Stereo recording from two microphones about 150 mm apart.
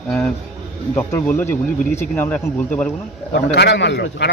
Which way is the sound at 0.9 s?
15° left (ahead or behind).